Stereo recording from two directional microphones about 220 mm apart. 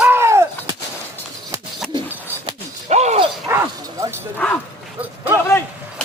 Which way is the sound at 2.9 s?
30° right (ahead or behind).